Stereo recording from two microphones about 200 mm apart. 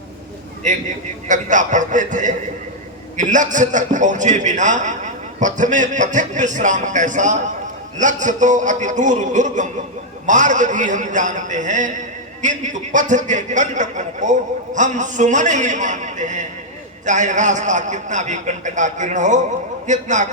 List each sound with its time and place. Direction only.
1.3 s a man's voice: 40° right (ahead or behind)